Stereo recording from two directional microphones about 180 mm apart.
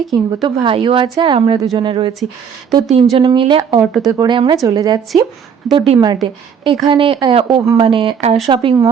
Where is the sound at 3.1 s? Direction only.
25° right (ahead or behind).